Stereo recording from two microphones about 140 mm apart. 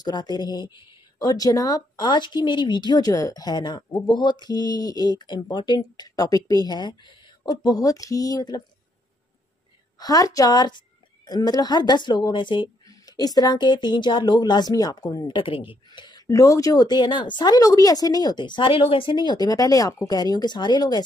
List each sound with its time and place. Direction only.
0.0 s a woman's voice: 30° left (ahead or behind)
9.9 s a woman's voice: 25° left (ahead or behind)